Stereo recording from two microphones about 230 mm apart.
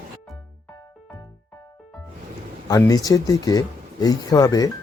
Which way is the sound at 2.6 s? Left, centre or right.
Centre.